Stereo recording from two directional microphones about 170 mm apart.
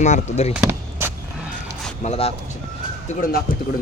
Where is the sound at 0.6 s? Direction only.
15° right (ahead or behind).